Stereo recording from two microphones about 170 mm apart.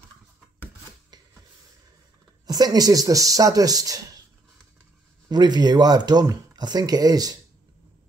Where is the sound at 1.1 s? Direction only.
25° right (ahead or behind).